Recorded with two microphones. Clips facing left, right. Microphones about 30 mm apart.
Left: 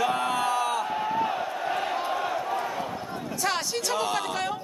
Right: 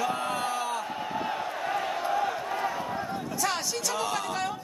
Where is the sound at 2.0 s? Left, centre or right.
Left.